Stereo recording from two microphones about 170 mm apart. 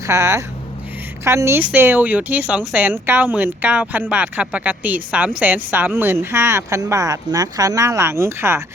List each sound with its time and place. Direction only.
0.0 s a woman's voice: 20° right (ahead or behind)